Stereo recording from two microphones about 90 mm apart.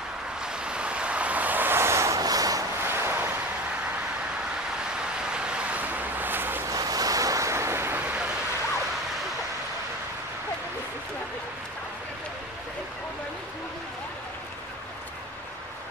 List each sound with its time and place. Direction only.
0.4 s vehicle: 10° right (ahead or behind); by 2.1 s 30° right (ahead or behind)
2.1 s vehicle: 45° right (ahead or behind)
2.8 s waves: 25° right (ahead or behind)
5.2 s vehicle: 10° right (ahead or behind)
6.7 s waves: 45° right (ahead or behind); by 8.0 s 30° right (ahead or behind)
8.0 s vehicle: 15° right (ahead or behind)